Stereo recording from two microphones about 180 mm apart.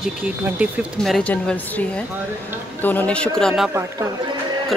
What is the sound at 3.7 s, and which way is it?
Speech, 15° right (ahead or behind).